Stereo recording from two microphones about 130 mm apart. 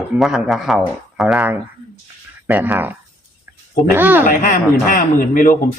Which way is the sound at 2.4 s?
15° right (ahead or behind).